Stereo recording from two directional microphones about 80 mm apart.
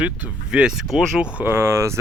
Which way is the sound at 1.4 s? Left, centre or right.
Right.